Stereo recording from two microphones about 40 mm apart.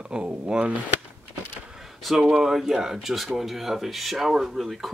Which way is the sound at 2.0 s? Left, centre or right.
Centre.